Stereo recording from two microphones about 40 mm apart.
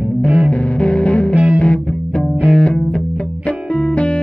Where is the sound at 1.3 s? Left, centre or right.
Centre.